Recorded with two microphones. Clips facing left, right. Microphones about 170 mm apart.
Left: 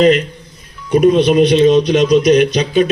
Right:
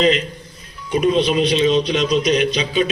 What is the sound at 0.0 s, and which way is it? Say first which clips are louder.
Speech: left 6 dB; 50° left (ahead or behind).